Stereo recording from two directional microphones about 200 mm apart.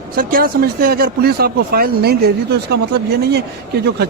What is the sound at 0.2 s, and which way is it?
Speech, 45° right (ahead or behind).